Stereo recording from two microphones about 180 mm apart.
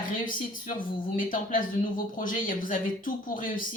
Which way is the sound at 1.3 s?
50° left (ahead or behind).